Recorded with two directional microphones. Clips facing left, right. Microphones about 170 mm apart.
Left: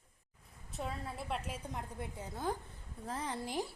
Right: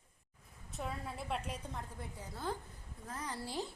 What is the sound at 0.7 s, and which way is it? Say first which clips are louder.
Speech: left 1 dB; centre (ahead or behind).